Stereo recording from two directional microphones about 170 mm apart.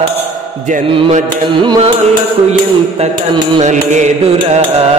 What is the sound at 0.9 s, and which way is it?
Music, 30° right (ahead or behind).